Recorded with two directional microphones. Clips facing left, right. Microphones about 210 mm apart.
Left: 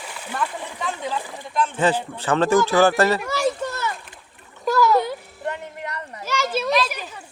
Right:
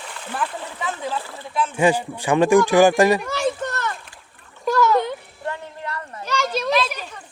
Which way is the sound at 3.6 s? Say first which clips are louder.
Even; 5° left (ahead or behind).